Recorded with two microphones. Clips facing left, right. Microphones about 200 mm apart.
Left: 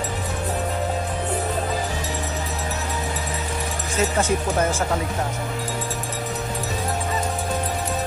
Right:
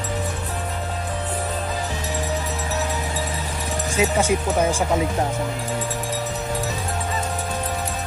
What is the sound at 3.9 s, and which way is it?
Speech, 10° right (ahead or behind).